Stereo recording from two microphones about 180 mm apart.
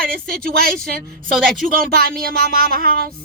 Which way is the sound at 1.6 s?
55° right (ahead or behind).